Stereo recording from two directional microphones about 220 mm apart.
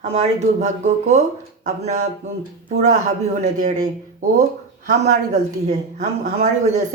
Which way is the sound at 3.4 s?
35° right (ahead or behind).